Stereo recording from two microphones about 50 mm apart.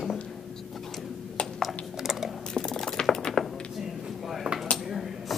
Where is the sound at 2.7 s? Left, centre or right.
Centre.